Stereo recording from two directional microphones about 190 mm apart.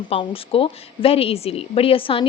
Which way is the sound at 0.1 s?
30° left (ahead or behind).